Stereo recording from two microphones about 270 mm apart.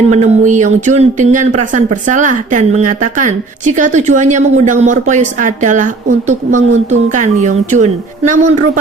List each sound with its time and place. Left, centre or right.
0.1 s a woman's voice: right